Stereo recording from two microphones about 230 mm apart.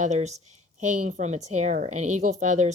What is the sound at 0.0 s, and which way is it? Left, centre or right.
Speech, right.